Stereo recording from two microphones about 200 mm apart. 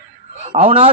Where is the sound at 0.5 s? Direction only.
30° right (ahead or behind).